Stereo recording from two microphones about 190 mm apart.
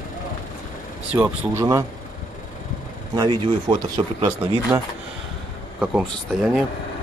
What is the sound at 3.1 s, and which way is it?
Speech, 25° right (ahead or behind).